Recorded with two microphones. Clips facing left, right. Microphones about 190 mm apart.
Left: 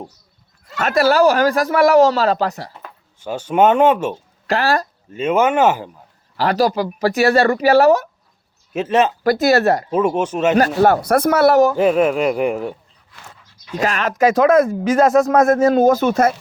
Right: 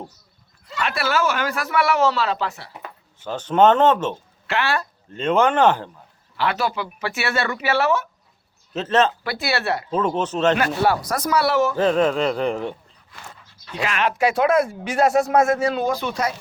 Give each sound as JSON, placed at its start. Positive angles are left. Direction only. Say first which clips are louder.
{"t": 0.8, "sound": "speech", "louder": "left 8 dB", "side_deg": 40}
{"t": 3.2, "sound": "speech", "louder": "left 1 dB", "side_deg": 10}
{"t": 4.4, "sound": "speech", "louder": "left 5 dB", "side_deg": 35}
{"t": 5.1, "sound": "speech", "louder": "left 2 dB", "side_deg": 5}
{"t": 6.3, "sound": "speech", "louder": "left 7 dB", "side_deg": 40}
{"t": 8.7, "sound": "speech", "louder": "left 3 dB", "side_deg": 10}
{"t": 9.2, "sound": "speech", "louder": "left 10 dB", "side_deg": 40}
{"t": 9.9, "sound": "speech", "louder": "left 4 dB", "side_deg": 10}
{"t": 10.6, "sound": "speech", "louder": "left 6 dB", "side_deg": 45}
{"t": 11.8, "sound": "speech", "louder": "left 3 dB", "side_deg": 10}
{"t": 13.7, "sound": "speech", "louder": "left 4 dB", "side_deg": 40}